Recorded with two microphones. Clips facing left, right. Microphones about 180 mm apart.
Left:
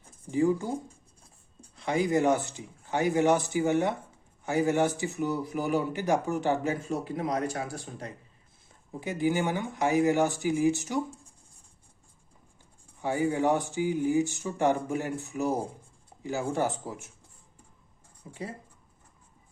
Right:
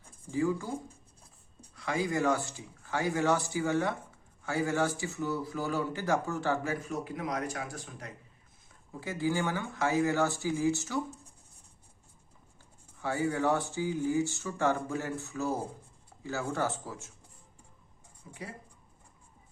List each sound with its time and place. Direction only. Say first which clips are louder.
0.3 s speech: left 5 dB; 20° left (ahead or behind)
1.7 s speech: left 5 dB; 20° left (ahead or behind)
8.9 s speech: left 4 dB; 20° left (ahead or behind)
13.0 s speech: left 3 dB; 15° left (ahead or behind)
18.3 s speech: left 4 dB; 30° left (ahead or behind)